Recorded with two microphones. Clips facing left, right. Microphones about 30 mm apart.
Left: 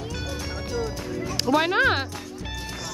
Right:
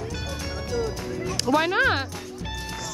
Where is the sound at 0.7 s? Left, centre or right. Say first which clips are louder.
Right 2 dB; centre.